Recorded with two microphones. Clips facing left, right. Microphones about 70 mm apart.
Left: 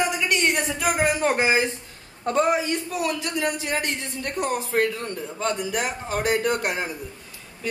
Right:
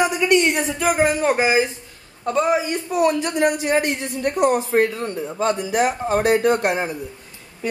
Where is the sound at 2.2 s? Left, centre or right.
Centre.